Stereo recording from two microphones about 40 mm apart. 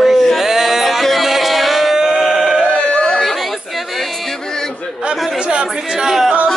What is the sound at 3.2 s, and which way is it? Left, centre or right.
Chatter, centre.